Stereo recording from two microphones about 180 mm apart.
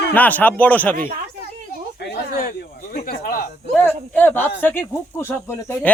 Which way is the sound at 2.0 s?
55° left (ahead or behind).